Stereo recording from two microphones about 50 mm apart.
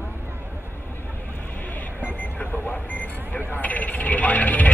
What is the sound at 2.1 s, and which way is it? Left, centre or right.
Mechanisms, left.